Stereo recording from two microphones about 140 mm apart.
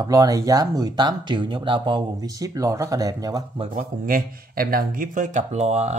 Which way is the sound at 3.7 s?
75° right (ahead or behind).